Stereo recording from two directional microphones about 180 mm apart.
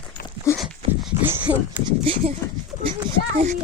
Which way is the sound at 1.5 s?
10° right (ahead or behind).